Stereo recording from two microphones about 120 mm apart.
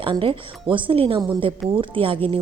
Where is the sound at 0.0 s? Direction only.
45° right (ahead or behind).